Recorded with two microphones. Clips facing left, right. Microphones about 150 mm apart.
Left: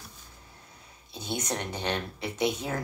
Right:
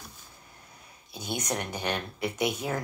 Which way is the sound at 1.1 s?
30° left (ahead or behind).